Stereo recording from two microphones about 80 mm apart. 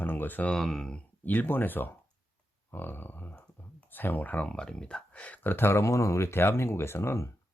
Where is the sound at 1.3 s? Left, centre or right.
Left.